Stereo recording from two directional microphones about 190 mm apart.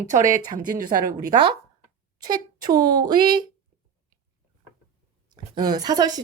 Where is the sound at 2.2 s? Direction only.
20° right (ahead or behind).